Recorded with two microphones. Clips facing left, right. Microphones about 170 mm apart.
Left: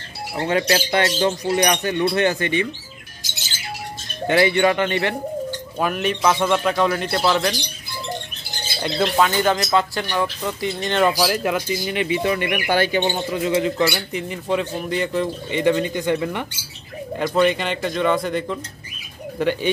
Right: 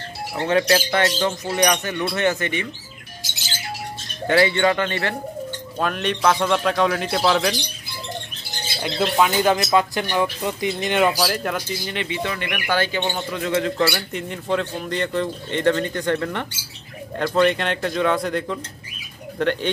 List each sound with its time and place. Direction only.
0.6 s speech: 25° left (ahead or behind)
4.3 s speech: 20° left (ahead or behind)
5.8 s speech: 5° left (ahead or behind)
8.8 s speech: centre (ahead or behind)
9.3 s speech: 15° right (ahead or behind)
11.1 s speech: 5° left (ahead or behind)
13.7 s speech: centre (ahead or behind)